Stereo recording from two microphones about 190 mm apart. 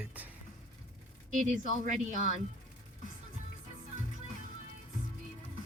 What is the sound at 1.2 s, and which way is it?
A woman's voice, 40° right (ahead or behind).